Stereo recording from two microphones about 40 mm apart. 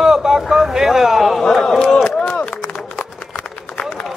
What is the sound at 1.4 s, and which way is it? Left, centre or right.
Speech, centre.